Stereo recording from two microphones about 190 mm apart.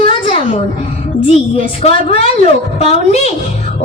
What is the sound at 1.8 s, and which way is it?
A woman's voice, 30° left (ahead or behind).